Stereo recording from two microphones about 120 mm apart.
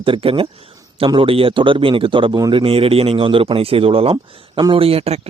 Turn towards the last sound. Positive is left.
turn(degrees=-55)  # may be behind; listen again after turning